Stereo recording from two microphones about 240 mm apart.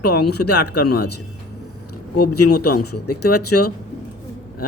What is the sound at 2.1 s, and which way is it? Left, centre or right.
Speech, left.